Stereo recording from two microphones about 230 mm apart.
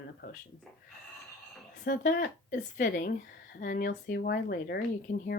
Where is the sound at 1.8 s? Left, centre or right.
Left.